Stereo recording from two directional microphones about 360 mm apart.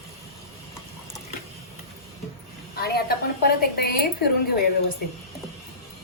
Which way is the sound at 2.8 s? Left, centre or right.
Left.